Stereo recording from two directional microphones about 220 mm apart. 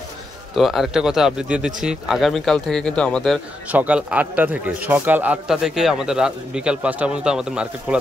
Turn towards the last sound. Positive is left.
turn(degrees=-5)  # may be behind; listen again after turning